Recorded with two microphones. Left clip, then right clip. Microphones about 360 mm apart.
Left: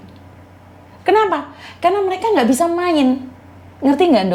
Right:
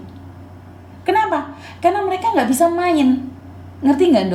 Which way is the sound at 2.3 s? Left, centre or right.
Left.